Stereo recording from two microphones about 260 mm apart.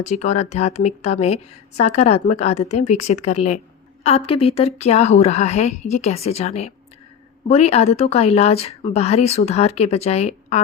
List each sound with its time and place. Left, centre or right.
0.0 s a woman's voice: left